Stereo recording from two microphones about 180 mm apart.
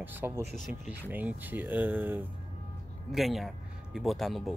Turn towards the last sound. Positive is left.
turn(degrees=0)  # may be behind; listen again after turning